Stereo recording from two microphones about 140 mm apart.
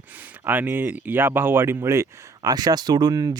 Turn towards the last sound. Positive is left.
turn(degrees=-25)  # may be behind; listen again after turning